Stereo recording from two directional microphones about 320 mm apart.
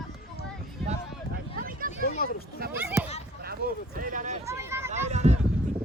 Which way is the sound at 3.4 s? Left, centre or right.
Right.